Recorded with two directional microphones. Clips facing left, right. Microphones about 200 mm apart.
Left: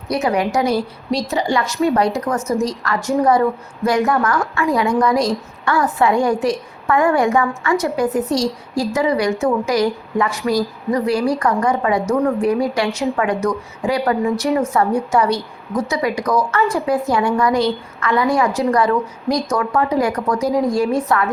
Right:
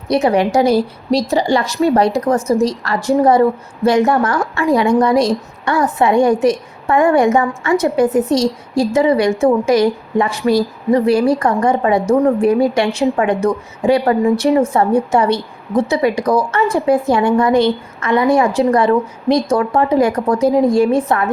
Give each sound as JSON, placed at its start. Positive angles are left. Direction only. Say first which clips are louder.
{"t": 0.1, "sound": "a woman's voice", "louder": "right 5 dB", "side_deg": -30}